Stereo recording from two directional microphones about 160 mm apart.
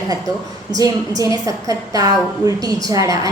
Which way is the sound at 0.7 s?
20° right (ahead or behind).